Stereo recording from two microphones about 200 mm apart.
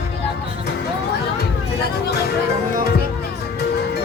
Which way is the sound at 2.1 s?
50° left (ahead or behind).